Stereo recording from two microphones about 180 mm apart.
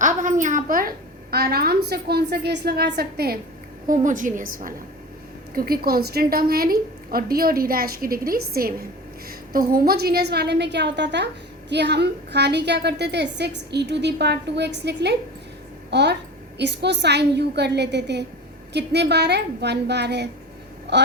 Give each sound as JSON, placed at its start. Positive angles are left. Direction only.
{"t": 0.0, "sound": "a woman's voice", "side_deg": -45}
{"t": 3.8, "sound": "a woman's voice", "side_deg": -45}